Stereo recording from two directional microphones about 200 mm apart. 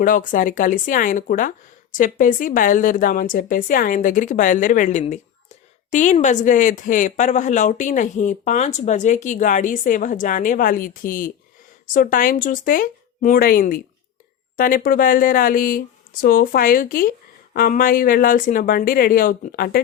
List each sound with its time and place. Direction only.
0.0 s speech: 40° left (ahead or behind)